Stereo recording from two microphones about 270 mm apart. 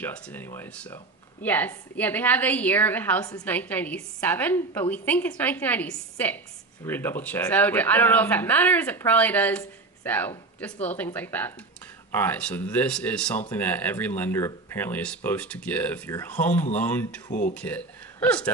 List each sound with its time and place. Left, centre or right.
0.0 s speech: centre
17.3 s speech: left
17.6 s speech: centre